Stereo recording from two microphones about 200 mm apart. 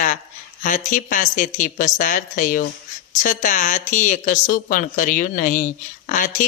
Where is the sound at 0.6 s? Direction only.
40° left (ahead or behind).